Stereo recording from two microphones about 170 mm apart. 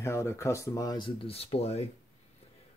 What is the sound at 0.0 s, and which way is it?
Speech, 15° left (ahead or behind).